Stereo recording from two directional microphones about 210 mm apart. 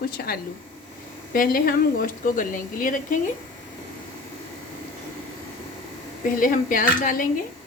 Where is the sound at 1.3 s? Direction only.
45° left (ahead or behind).